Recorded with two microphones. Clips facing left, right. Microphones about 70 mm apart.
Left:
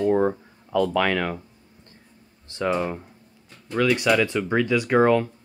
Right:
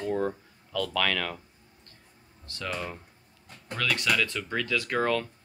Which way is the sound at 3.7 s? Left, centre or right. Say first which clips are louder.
Left 8 dB; centre.